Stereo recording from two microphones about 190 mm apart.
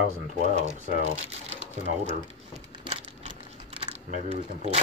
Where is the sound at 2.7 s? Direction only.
30° right (ahead or behind).